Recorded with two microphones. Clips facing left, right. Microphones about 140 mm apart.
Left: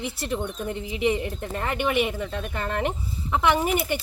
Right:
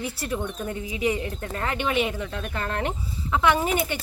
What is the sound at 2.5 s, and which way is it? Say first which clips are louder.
Speech: left 1 dB; 10° left (ahead or behind).